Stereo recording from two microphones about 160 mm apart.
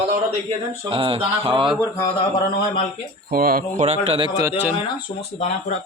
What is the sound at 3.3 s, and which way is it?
Speech, 65° right (ahead or behind).